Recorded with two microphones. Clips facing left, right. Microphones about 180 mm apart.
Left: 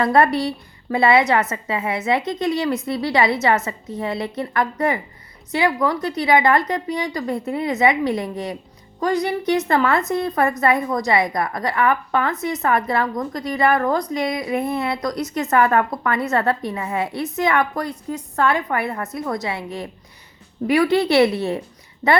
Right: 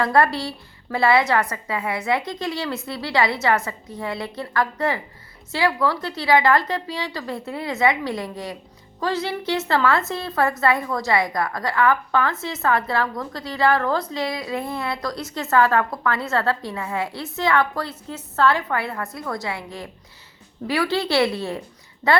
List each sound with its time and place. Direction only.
0.0 s a woman's voice: 20° left (ahead or behind)